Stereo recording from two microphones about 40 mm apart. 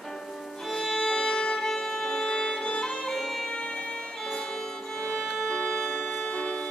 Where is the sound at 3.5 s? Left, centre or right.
Left.